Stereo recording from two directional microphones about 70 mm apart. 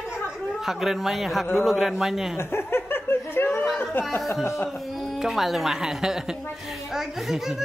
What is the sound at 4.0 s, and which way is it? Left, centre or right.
Speech, left.